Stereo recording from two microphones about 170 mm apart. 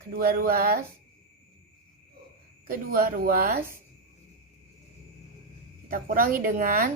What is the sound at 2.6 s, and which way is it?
Speech, 55° right (ahead or behind).